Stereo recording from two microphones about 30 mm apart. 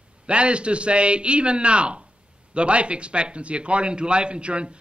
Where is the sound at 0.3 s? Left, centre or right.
Right.